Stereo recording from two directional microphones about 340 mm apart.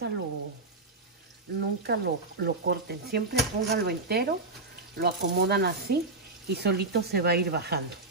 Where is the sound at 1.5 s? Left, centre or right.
Right.